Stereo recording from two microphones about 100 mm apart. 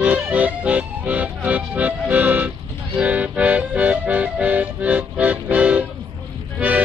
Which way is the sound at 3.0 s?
15° right (ahead or behind).